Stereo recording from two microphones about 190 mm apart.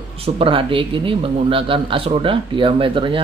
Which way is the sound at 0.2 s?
30° right (ahead or behind).